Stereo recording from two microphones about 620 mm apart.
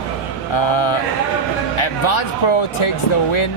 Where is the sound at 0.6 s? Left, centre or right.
Left.